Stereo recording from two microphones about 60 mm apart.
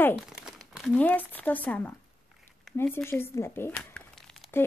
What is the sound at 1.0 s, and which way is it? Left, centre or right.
Speech, left.